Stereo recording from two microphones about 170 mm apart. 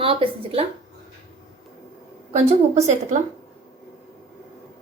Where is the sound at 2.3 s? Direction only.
40° right (ahead or behind).